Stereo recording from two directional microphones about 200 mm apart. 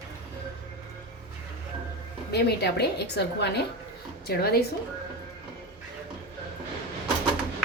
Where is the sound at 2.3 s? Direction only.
55° left (ahead or behind).